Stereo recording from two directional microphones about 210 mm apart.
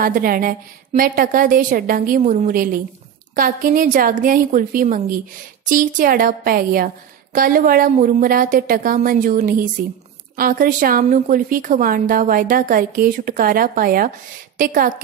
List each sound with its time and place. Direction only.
0.0 s a woman's voice: 40° right (ahead or behind)